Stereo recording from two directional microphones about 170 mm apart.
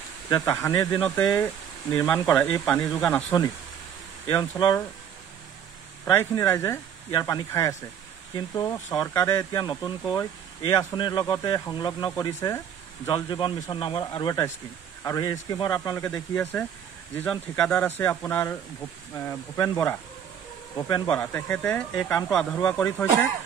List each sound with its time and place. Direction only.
0.3 s speech: 15° left (ahead or behind)
6.0 s speech: 15° left (ahead or behind)
20.7 s speech: 20° left (ahead or behind)
21.1 s speech: 10° left (ahead or behind)